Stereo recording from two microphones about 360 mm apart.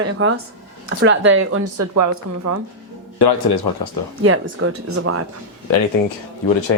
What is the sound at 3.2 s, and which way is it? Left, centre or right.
Speech, left.